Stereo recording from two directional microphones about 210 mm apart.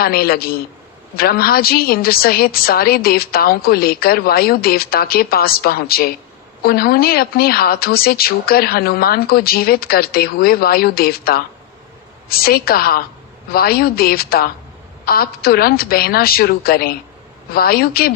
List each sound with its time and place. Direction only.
0.0 s a woman's voice: 45° left (ahead or behind)